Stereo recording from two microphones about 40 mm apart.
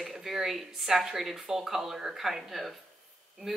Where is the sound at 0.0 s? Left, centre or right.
Centre.